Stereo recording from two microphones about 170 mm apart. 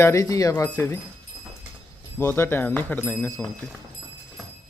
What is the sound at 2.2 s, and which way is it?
Speech, 15° left (ahead or behind).